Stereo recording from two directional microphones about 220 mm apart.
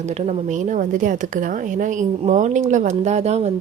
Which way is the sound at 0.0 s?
30° right (ahead or behind).